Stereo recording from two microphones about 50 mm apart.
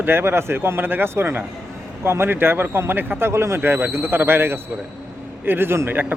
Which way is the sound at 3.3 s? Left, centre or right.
Right.